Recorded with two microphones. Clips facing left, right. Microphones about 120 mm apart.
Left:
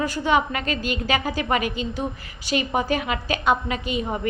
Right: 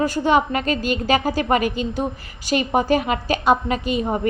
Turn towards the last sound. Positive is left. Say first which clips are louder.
# right 4 dB
turn(degrees=-40)  # may be behind; listen again after turning